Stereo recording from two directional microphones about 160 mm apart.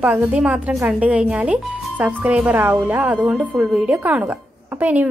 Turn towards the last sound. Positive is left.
turn(degrees=-10)  # may be behind; listen again after turning